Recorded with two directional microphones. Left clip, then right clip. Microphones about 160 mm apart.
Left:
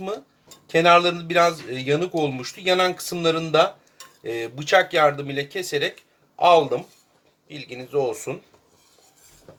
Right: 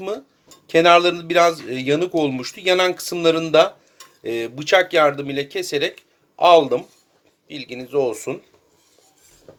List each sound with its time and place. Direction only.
0.7 s a man's voice: 40° right (ahead or behind)